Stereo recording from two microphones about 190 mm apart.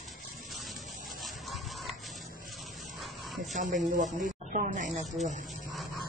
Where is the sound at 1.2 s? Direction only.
Centre (ahead or behind).